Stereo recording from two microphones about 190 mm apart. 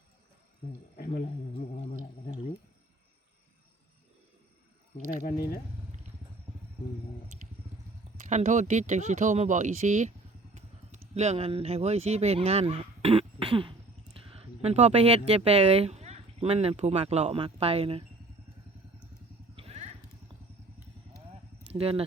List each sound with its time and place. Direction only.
0.9 s a sound: 50° left (ahead or behind)
4.9 s speech: 50° left (ahead or behind)
8.2 s speech: 40° right (ahead or behind)
11.1 s speech: 35° right (ahead or behind)
19.5 s vehicle: 35° right (ahead or behind)
21.7 s speech: 30° right (ahead or behind)